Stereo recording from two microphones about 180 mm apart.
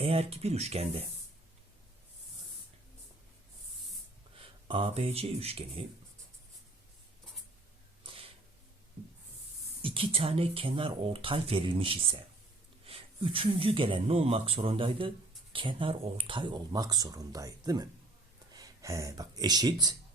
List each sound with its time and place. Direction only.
0.0 s speech: 35° right (ahead or behind)
4.4 s speech: 30° right (ahead or behind)
8.0 s a sound: 30° right (ahead or behind)
9.8 s speech: 30° right (ahead or behind)